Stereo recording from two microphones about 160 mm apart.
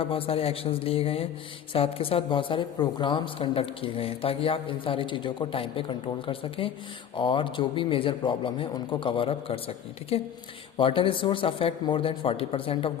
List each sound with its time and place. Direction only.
0.0 s speech: 35° left (ahead or behind)